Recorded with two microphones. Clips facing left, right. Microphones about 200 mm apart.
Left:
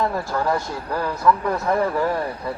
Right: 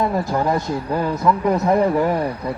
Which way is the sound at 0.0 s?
20° right (ahead or behind).